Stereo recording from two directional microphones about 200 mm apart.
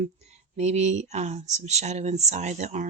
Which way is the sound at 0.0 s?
35° right (ahead or behind).